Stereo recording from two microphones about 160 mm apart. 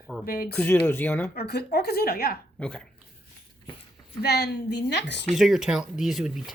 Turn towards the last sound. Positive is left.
turn(degrees=-5)  # may be behind; listen again after turning